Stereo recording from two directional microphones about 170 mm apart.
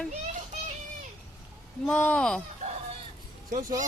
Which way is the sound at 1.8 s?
5° left (ahead or behind).